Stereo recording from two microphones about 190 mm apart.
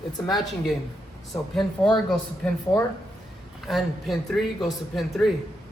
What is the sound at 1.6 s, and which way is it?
Speech, centre (ahead or behind).